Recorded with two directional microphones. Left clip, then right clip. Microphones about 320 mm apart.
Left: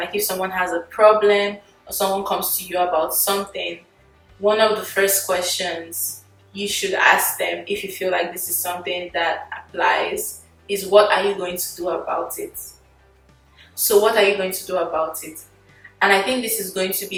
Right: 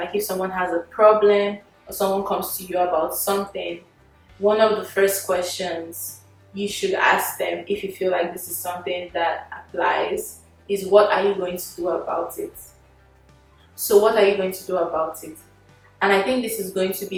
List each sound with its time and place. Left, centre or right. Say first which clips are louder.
0.0 s speech: left 1 dB; centre
2.0 s speech: even; right
2.3 s speech: left 1 dB; centre
13.7 s speech: even; centre